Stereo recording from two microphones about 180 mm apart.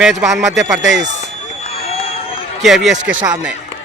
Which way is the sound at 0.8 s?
80° right.